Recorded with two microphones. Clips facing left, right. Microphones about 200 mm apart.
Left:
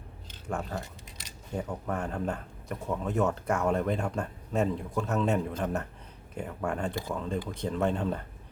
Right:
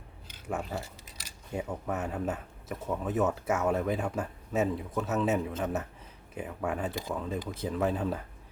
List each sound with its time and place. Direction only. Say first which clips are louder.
0.3 s speech: even; 10° right (ahead or behind)